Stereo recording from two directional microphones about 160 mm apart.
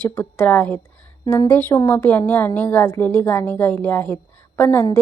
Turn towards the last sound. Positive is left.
turn(degrees=10)  # may be behind; listen again after turning